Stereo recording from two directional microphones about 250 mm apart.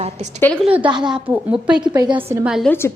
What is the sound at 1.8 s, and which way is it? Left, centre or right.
Speech, centre.